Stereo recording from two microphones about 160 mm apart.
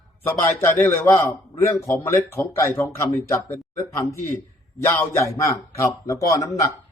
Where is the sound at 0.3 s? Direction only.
15° left (ahead or behind).